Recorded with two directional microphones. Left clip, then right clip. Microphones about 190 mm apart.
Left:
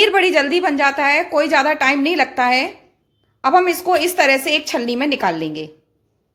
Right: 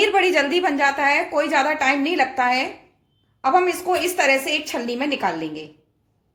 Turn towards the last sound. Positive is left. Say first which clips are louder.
# left 4 dB
turn(degrees=35)  # may be behind; listen again after turning